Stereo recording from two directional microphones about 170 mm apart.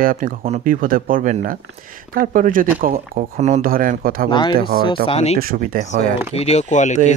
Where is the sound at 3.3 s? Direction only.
45° right (ahead or behind).